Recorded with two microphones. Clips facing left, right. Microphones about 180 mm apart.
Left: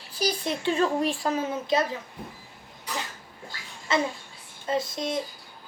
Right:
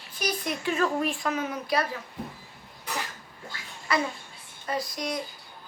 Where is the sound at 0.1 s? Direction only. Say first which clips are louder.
Left 3 dB; 30° left (ahead or behind).